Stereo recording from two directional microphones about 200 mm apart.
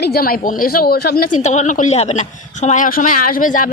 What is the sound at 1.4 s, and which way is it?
A woman's voice, 35° left (ahead or behind).